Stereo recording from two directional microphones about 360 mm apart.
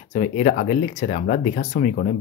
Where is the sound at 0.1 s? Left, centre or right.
Left.